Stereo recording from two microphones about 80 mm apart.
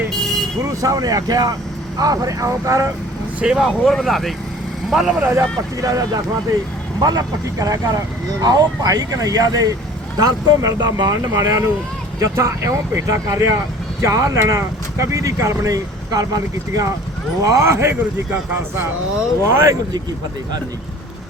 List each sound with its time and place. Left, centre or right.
0.6 s speech: right
3.4 s speech: centre
5.4 s speech: right
10.8 s speech: right
11.1 s speech: right